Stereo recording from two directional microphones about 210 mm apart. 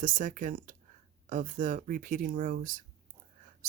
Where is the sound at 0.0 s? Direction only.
40° right (ahead or behind).